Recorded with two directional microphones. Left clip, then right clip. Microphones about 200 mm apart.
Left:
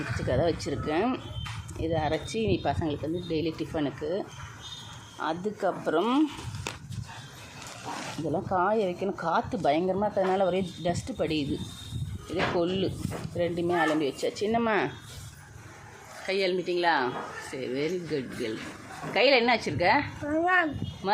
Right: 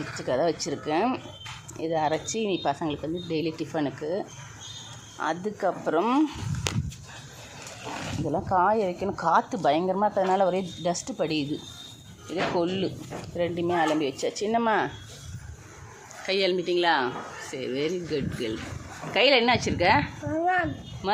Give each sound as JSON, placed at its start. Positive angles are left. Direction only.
{"t": 0.2, "sound": "a woman's voice", "side_deg": 0}
{"t": 8.3, "sound": "a woman's voice", "side_deg": 0}
{"t": 16.2, "sound": "speech", "side_deg": -10}
{"t": 20.3, "sound": "speech", "side_deg": 30}
{"t": 21.0, "sound": "a woman's voice", "side_deg": -5}